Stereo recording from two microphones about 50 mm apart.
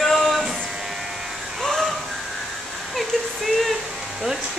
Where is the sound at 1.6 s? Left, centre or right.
Centre.